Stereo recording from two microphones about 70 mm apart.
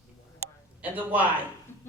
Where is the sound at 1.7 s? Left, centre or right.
Left.